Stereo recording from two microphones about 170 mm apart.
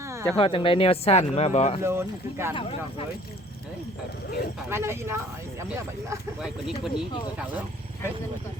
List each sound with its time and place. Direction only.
0.3 s speech: 30° left (ahead or behind)
1.8 s speech: 15° right (ahead or behind)
2.6 s speech: 30° left (ahead or behind)
4.7 s speech: 15° right (ahead or behind)
6.4 s speech: 5° right (ahead or behind)